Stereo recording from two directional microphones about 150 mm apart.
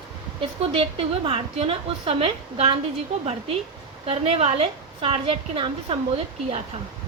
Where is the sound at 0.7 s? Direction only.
40° right (ahead or behind).